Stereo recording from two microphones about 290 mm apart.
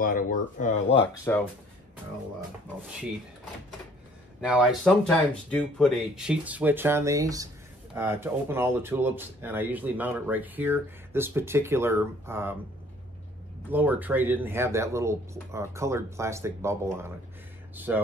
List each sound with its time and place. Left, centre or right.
0.0 s speech: left
1.3 s speech: centre
4.4 s speech: centre
13.7 s speech: centre